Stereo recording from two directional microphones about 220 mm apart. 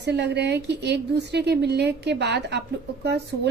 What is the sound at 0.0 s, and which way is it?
A woman's voice, 50° right (ahead or behind).